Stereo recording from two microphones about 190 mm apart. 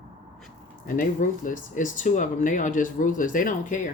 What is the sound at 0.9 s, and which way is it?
Speech, 45° left (ahead or behind).